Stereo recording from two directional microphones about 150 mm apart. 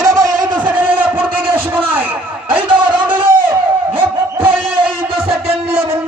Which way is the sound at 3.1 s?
35° right (ahead or behind).